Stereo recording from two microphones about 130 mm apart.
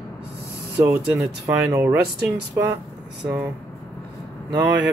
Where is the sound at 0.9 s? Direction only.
20° right (ahead or behind).